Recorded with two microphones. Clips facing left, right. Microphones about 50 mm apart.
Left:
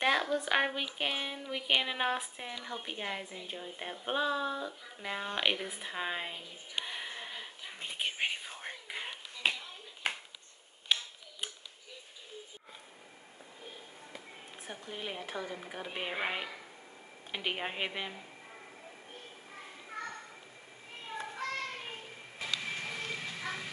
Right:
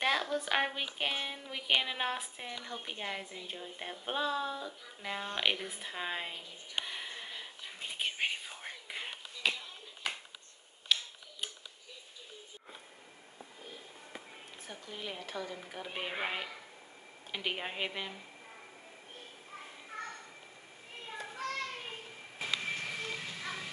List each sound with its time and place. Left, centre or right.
0.0 s a sound: centre
0.9 s speech: centre
6.8 s whispering: centre
9.4 s clapping: left
10.9 s tick-tock: left
14.7 s speech: left
21.2 s children playing: left
22.7 s a sound: centre